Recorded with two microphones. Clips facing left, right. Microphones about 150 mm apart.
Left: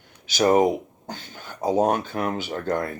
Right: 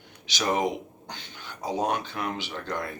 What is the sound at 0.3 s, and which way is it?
Speech, 45° left (ahead or behind).